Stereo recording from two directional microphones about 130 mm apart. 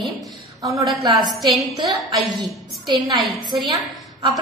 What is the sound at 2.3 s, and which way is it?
Speech, 35° right (ahead or behind).